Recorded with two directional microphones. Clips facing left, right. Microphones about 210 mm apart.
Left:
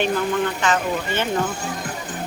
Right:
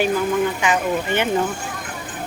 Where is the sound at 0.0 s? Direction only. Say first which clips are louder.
Right 2 dB; 10° right (ahead or behind).